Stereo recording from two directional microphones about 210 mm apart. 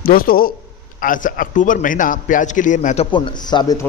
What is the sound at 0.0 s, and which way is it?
A man's voice, 45° left (ahead or behind).